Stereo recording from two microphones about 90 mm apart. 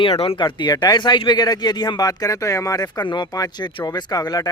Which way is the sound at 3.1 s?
55° left (ahead or behind).